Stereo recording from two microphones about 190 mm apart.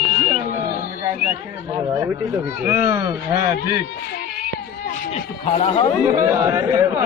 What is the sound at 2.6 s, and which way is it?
Speech, 10° right (ahead or behind).